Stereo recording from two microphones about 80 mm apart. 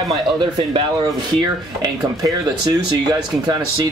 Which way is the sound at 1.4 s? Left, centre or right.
Right.